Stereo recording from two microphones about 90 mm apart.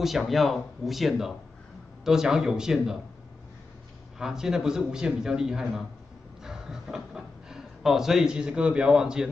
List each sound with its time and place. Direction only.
0.0 s a man's voice: centre (ahead or behind)
4.2 s a man's voice: 5° right (ahead or behind)